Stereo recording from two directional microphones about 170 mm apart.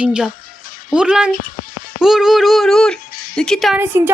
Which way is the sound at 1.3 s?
50° left (ahead or behind).